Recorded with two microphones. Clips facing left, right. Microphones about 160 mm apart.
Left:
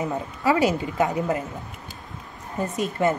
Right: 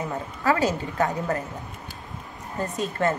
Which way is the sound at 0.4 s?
15° left (ahead or behind).